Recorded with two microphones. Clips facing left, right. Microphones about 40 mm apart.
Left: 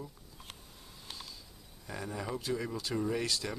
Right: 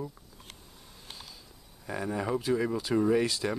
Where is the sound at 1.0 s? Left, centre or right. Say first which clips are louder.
Even; centre.